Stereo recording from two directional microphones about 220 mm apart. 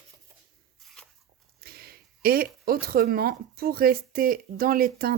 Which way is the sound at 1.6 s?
45° right (ahead or behind).